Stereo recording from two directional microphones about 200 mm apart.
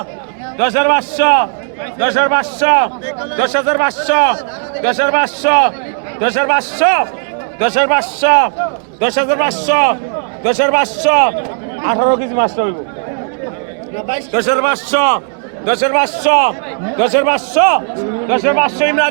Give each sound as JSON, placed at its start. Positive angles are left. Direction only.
{"t": 0.6, "sound": "a man's voice", "side_deg": -50}
{"t": 14.3, "sound": "a man's voice", "side_deg": -55}